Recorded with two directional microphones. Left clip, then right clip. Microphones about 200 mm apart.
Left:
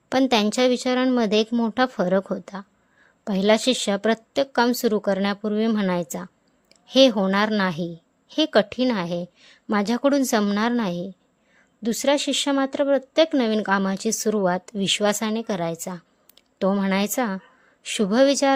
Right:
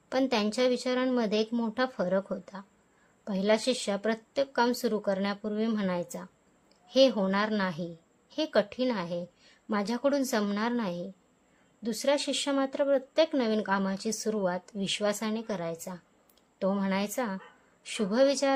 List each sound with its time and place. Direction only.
0.1 s a woman's voice: 40° left (ahead or behind)